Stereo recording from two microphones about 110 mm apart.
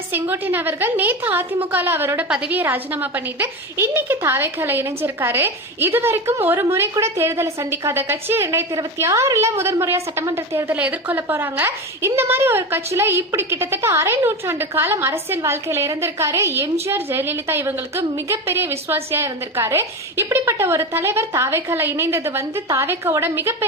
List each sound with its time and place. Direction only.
0.1 s a woman's voice: 20° right (ahead or behind)